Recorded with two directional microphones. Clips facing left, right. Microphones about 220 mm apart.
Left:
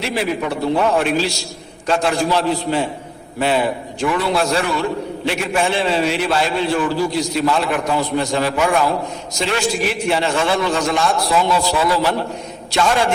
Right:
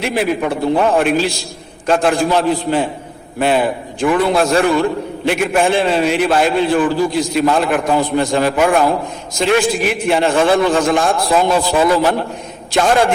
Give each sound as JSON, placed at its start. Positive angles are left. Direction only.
{"t": 0.0, "sound": "a man's voice", "side_deg": -50}